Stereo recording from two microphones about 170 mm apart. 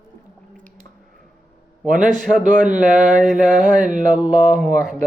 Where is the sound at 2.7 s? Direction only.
50° right (ahead or behind).